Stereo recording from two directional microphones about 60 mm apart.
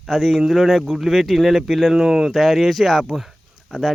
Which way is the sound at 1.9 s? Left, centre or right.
Centre.